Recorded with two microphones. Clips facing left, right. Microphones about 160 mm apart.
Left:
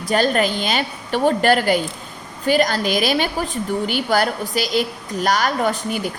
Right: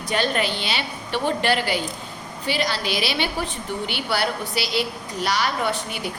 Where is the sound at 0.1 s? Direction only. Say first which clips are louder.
Left 5 dB; 40° left (ahead or behind).